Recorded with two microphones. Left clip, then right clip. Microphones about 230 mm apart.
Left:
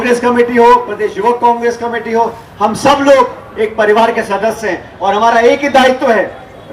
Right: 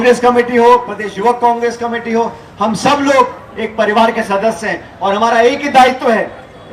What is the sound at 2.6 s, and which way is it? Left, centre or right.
A man's voice, right.